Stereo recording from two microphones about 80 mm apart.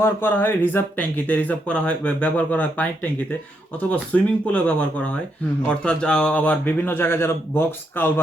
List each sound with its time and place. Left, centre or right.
0.0 s speech: left